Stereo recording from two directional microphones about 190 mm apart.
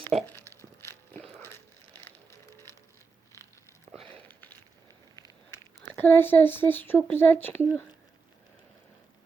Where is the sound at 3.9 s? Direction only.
10° left (ahead or behind).